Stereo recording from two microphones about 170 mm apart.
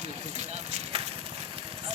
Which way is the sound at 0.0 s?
40° right (ahead or behind).